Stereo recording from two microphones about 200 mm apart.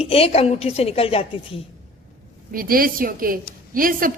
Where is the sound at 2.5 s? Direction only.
45° right (ahead or behind).